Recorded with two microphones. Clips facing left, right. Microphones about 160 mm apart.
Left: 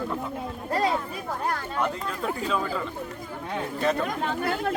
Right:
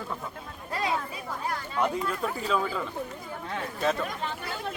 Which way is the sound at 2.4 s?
5° right (ahead or behind).